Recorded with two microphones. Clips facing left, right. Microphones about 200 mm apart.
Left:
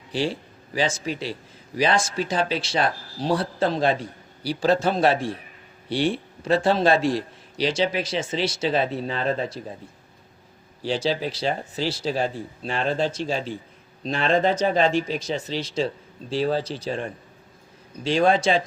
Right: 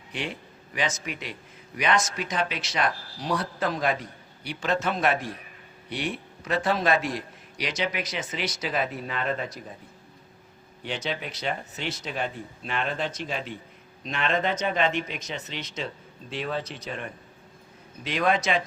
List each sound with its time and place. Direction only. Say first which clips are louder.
0.1 s a man's voice: left 8 dB; 30° left (ahead or behind)
10.8 s a man's voice: left 8 dB; 30° left (ahead or behind)